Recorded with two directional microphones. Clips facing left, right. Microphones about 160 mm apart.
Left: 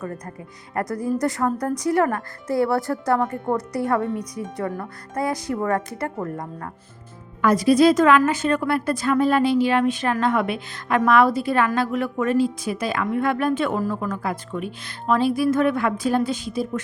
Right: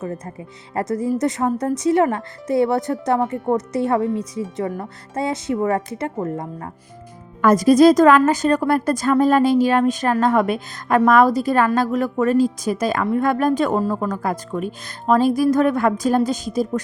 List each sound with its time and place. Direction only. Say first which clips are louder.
0.7 s speech: right 3 dB; 25° right (ahead or behind)
7.4 s a woman's voice: right 4 dB; 45° right (ahead or behind)